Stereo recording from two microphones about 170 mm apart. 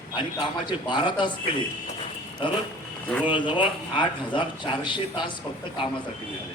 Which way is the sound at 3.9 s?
30° left (ahead or behind).